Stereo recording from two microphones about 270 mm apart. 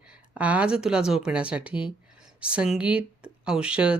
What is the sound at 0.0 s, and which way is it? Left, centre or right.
A woman's voice, centre.